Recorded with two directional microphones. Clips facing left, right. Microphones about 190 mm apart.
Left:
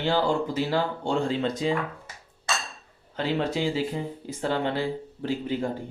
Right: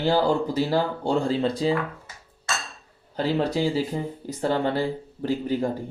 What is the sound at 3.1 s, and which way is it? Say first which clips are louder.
Speech: right 3 dB; 40° right (ahead or behind).